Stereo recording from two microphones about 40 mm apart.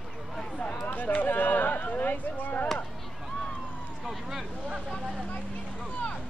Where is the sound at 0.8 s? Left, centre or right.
Left.